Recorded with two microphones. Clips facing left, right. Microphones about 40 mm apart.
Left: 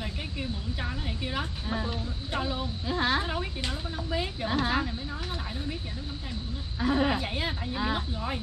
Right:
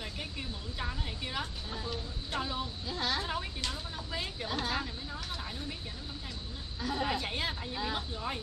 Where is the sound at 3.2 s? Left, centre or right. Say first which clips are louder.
Left 4 dB; centre.